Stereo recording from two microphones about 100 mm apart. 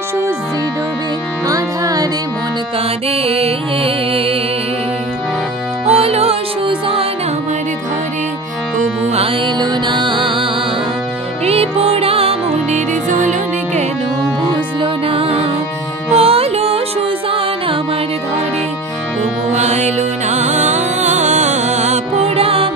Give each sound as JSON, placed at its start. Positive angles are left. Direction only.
{"t": 1.5, "sound": "music", "side_deg": -40}
{"t": 3.1, "sound": "music", "side_deg": -85}
{"t": 5.9, "sound": "music", "side_deg": -85}
{"t": 9.6, "sound": "music", "side_deg": -50}
{"t": 11.4, "sound": "music", "side_deg": -85}
{"t": 14.8, "sound": "music", "side_deg": -70}
{"t": 16.2, "sound": "music", "side_deg": -85}
{"t": 22.2, "sound": "music", "side_deg": -75}